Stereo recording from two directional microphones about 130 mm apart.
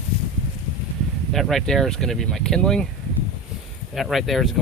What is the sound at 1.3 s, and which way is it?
Speech, centre (ahead or behind).